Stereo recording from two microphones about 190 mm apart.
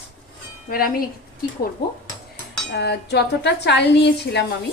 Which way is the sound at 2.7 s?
60° left (ahead or behind).